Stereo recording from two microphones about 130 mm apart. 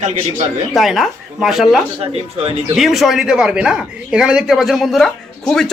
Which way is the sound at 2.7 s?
Centre (ahead or behind).